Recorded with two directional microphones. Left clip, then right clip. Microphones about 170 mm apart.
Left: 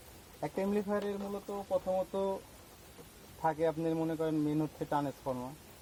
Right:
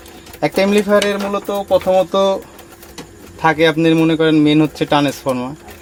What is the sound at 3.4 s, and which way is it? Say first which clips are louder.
Speech: right 19 dB; 10° left (ahead or behind).